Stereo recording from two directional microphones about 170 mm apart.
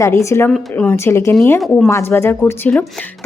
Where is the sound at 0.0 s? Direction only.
15° left (ahead or behind).